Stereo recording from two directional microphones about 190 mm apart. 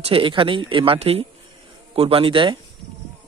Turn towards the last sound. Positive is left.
turn(degrees=-25)  # may be behind; listen again after turning